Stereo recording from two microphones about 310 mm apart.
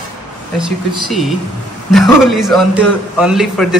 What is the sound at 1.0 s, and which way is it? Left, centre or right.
A man's voice, centre.